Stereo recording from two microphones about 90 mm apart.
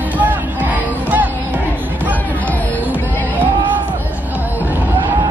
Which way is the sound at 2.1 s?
20° left (ahead or behind).